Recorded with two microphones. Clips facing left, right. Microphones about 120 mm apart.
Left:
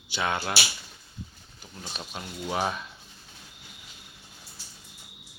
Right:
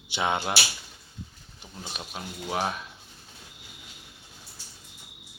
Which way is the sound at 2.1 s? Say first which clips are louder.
Even; centre (ahead or behind).